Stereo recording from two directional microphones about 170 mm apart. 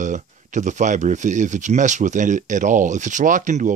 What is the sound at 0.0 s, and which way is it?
Speech, 45° right (ahead or behind).